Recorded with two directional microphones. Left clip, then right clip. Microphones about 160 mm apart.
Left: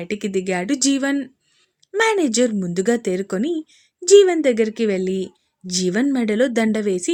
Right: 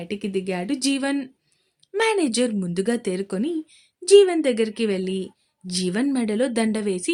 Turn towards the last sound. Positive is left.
turn(degrees=25)  # may be behind; listen again after turning